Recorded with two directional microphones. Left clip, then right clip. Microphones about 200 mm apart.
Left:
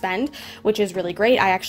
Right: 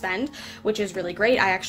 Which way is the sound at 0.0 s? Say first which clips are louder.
Left 3 dB; 35° left (ahead or behind).